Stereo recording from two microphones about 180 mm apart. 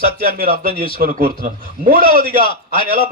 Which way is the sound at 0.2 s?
55° right (ahead or behind).